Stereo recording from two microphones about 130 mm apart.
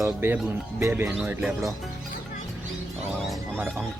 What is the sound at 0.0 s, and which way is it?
Speech, 15° right (ahead or behind).